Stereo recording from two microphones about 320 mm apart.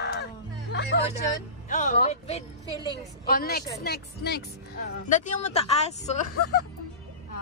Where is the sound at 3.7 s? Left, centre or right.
Left.